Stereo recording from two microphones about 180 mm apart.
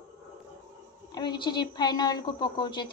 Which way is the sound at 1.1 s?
25° left (ahead or behind).